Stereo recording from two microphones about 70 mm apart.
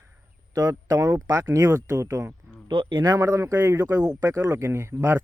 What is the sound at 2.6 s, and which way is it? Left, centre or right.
Speech, right.